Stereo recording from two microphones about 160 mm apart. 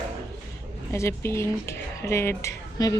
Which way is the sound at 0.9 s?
15° left (ahead or behind).